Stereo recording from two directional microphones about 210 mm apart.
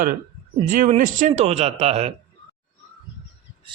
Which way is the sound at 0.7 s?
40° right (ahead or behind).